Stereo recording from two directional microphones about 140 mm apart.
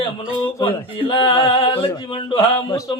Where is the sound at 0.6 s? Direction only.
40° left (ahead or behind).